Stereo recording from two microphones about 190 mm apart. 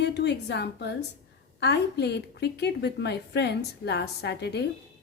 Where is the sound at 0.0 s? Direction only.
65° left (ahead or behind).